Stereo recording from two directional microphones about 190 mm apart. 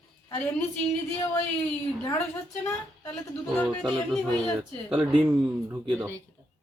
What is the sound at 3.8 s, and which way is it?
Speech, centre (ahead or behind).